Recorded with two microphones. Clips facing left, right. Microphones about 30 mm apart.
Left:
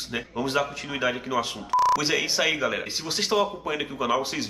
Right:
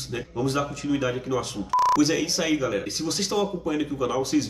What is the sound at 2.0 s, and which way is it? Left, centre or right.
A man's voice, left.